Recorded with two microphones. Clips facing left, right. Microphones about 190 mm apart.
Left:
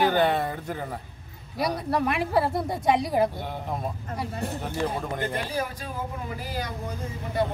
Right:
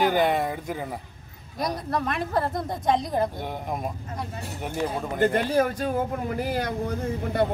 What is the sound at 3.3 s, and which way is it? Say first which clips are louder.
Speech: right 1 dB; 15° right (ahead or behind).